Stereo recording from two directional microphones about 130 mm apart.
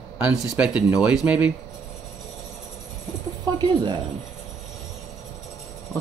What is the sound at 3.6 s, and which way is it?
Speech, 35° right (ahead or behind).